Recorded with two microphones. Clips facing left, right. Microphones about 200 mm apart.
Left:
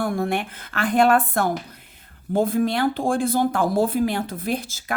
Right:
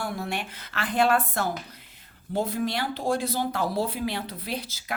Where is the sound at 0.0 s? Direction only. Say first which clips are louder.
Left 8 dB; 50° left (ahead or behind).